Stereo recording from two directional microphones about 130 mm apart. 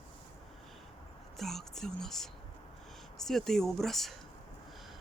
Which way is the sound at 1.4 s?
Centre (ahead or behind).